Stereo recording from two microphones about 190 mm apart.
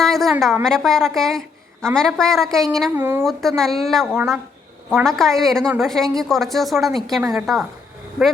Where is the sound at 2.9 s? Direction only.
10° right (ahead or behind).